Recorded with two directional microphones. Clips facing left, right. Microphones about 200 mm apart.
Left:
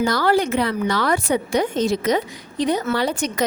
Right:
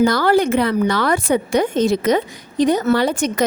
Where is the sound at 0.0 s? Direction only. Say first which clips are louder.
Right 4 dB; 55° right (ahead or behind).